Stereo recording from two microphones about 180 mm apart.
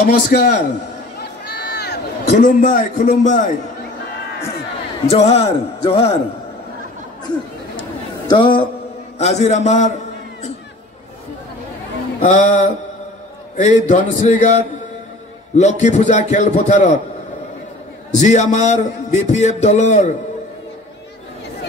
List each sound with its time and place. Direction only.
0.0 s a man's voice: 55° left (ahead or behind)
1.2 s run: 65° left (ahead or behind)
2.2 s a man's voice: 45° left (ahead or behind)
5.0 s a man's voice: 35° left (ahead or behind)
8.3 s a man's voice: 25° left (ahead or behind)
9.2 s a man's voice: 40° left (ahead or behind)
12.2 s a man's voice: 45° left (ahead or behind)
18.1 s a man's voice: 40° left (ahead or behind)